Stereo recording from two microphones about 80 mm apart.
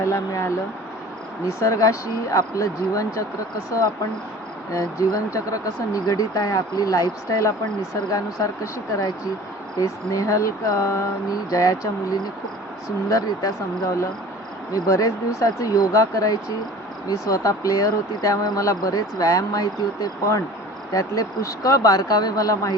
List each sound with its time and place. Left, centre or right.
0.0 s speech: left
4.7 s speech: left
14.7 s speech: left